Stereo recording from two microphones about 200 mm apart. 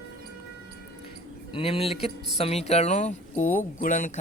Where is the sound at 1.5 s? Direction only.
30° left (ahead or behind).